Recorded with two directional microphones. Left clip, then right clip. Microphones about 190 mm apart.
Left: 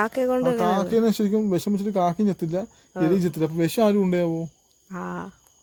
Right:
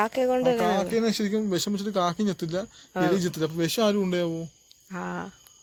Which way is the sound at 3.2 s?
55° left (ahead or behind).